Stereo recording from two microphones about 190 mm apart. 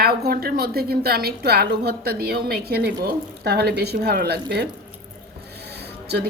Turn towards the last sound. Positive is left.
turn(degrees=-60)  # may be behind; listen again after turning